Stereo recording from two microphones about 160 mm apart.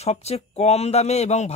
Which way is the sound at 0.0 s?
40° left (ahead or behind).